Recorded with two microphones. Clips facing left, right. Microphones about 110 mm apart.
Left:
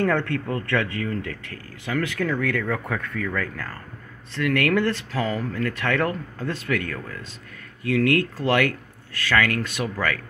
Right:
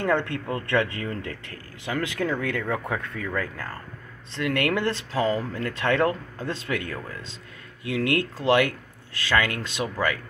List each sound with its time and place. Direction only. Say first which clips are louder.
0.0 s speech: left 2 dB; 20° right (ahead or behind)